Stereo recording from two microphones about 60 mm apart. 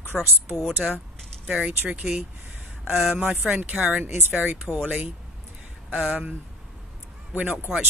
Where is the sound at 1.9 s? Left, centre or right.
Right.